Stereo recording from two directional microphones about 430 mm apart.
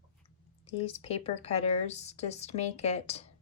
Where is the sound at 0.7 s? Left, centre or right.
Centre.